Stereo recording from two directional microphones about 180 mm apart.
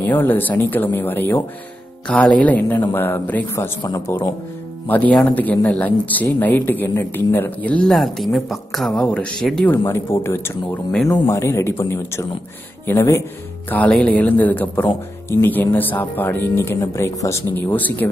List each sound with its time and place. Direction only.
0.0 s speech: 10° left (ahead or behind)
3.8 s a man's voice: 20° left (ahead or behind)
4.8 s speech: 10° left (ahead or behind)
9.8 s speech: 15° left (ahead or behind)